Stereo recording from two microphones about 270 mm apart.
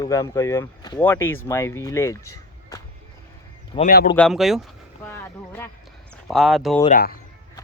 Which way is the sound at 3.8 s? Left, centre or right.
Left.